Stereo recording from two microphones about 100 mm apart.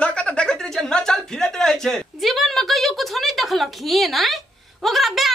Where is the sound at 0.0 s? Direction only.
10° left (ahead or behind).